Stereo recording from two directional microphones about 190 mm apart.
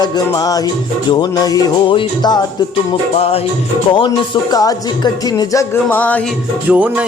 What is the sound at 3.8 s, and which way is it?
Music, 25° left (ahead or behind).